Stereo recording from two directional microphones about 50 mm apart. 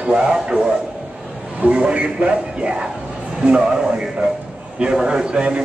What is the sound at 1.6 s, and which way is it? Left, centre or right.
A man's voice, right.